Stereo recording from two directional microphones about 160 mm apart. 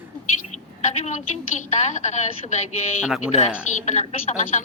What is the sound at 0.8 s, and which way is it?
A woman's voice, 45° left (ahead or behind).